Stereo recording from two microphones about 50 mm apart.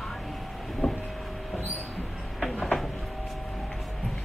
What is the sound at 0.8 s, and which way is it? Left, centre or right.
Vehicle, left.